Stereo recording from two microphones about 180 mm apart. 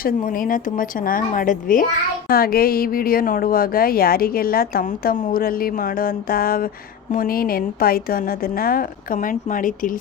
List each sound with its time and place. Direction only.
0.0 s a woman's voice: 50° left (ahead or behind)